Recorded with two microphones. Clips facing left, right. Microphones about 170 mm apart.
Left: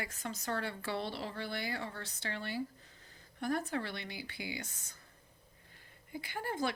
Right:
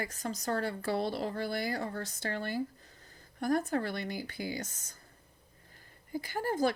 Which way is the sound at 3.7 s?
45° right (ahead or behind).